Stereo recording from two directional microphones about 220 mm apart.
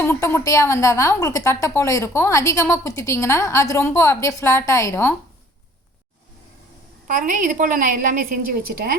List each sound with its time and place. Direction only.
0.0 s a woman's voice: 10° left (ahead or behind)
7.1 s a woman's voice: 35° right (ahead or behind)